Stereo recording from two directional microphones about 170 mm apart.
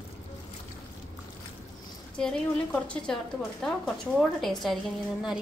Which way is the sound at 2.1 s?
5° left (ahead or behind).